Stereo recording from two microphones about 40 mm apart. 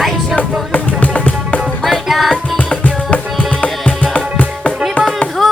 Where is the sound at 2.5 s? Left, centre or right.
Left.